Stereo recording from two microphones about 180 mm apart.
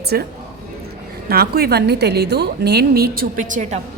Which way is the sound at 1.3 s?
60° right (ahead or behind).